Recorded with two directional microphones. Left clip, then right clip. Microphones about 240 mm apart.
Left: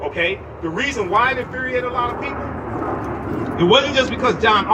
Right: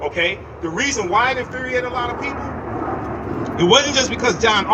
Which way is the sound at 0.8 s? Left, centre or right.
Right.